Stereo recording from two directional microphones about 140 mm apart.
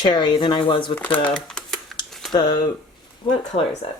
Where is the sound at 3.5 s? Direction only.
90° left.